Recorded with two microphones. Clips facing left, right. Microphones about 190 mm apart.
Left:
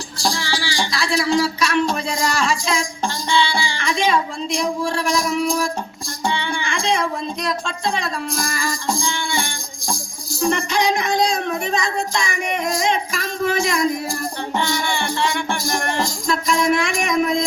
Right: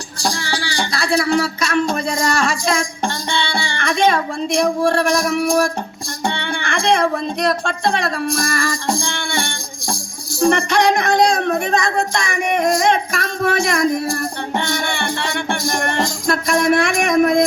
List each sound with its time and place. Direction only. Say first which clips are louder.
1.2 s music: right 1 dB; 50° right (ahead or behind); by 5.7 s 70° right (ahead or behind)
6.2 s speech: right 1 dB; 60° right (ahead or behind)
10.4 s music: right 5 dB; 70° right (ahead or behind)
12.3 s music: right 6 dB; 50° right (ahead or behind)
12.7 s a sound: right 4 dB; 65° right (ahead or behind)
14.1 s music: right 3 dB; 65° right (ahead or behind)